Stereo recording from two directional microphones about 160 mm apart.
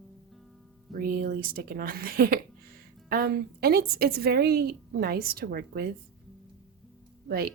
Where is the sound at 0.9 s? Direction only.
65° right (ahead or behind).